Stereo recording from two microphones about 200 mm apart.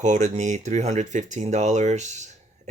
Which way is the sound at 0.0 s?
35° right (ahead or behind).